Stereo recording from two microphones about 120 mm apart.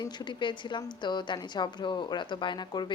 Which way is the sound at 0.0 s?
35° left (ahead or behind).